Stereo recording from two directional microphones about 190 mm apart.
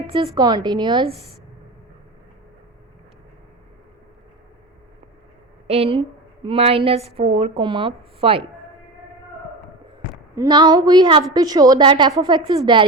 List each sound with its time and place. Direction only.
0.1 s a woman's voice: 25° right (ahead or behind)
5.6 s a woman's voice: 30° right (ahead or behind)
10.3 s a woman's voice: 20° right (ahead or behind)